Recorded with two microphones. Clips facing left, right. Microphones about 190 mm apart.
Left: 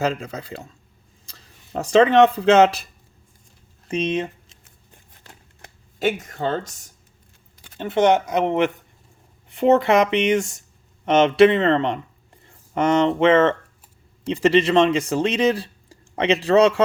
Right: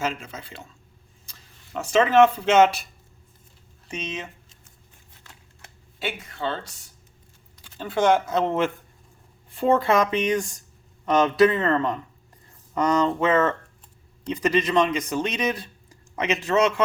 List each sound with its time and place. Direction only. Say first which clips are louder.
0.0 s speech: left 5 dB; 35° left (ahead or behind)
4.0 s speech: left 11 dB; 30° left (ahead or behind)
6.0 s speech: left 7 dB; 45° left (ahead or behind)
7.8 s speech: left 3 dB; 20° left (ahead or behind)